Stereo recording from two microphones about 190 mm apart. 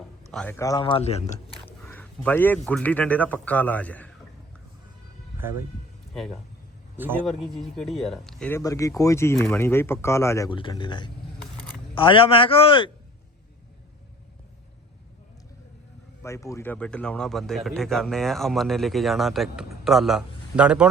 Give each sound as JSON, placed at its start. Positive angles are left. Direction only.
{"t": 0.3, "sound": "speech", "side_deg": 5}
{"t": 1.6, "sound": "a sound", "side_deg": 10}
{"t": 2.6, "sound": "speech", "side_deg": 5}
{"t": 5.4, "sound": "speech", "side_deg": -10}
{"t": 6.1, "sound": "speech", "side_deg": 0}
{"t": 6.9, "sound": "a man's voice", "side_deg": -10}
{"t": 7.3, "sound": "a man's voice", "side_deg": 0}
{"t": 16.2, "sound": "speech", "side_deg": 15}